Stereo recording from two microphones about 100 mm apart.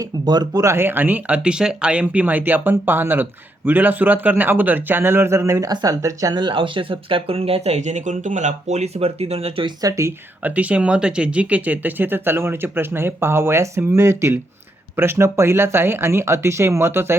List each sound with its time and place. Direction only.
0.3 s speech: 45° right (ahead or behind)
0.6 s speech: 25° right (ahead or behind)
6.3 s speech: 50° right (ahead or behind); by 9.6 s 85° right
9.8 s speech: 35° right (ahead or behind)
10.4 s speech: 15° right (ahead or behind)